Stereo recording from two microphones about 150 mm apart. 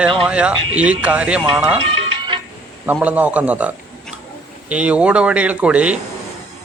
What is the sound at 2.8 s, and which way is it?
Speech, 10° right (ahead or behind).